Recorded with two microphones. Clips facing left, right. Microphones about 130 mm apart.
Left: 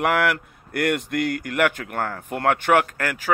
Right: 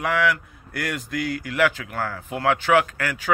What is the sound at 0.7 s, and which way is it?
Speech, 55° left (ahead or behind).